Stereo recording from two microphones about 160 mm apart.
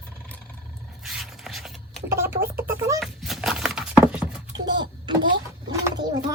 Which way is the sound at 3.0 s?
Centre (ahead or behind).